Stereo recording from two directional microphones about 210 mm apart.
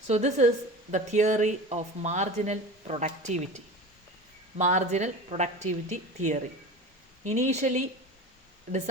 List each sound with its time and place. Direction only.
0.1 s a woman's voice: 35° right (ahead or behind)